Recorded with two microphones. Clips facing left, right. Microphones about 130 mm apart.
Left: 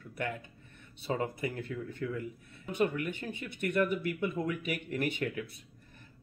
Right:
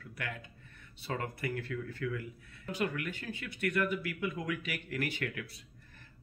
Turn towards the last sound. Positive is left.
turn(degrees=20)  # may be behind; listen again after turning